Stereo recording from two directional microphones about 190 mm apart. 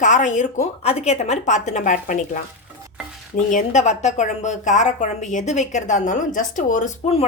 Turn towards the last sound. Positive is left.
turn(degrees=35)  # may be behind; listen again after turning